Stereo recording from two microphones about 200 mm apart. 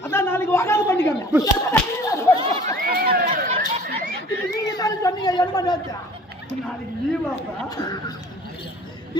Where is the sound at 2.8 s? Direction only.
50° right (ahead or behind).